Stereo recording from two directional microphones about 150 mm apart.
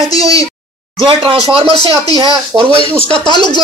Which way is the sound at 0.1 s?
25° left (ahead or behind).